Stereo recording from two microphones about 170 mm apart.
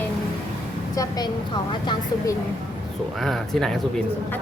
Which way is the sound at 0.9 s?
25° left (ahead or behind).